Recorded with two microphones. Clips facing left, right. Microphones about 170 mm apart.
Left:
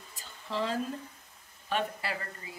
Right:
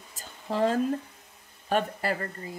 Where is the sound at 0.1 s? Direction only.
45° right (ahead or behind).